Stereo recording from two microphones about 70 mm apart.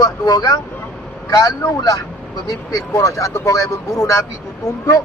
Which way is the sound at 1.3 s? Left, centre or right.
Left.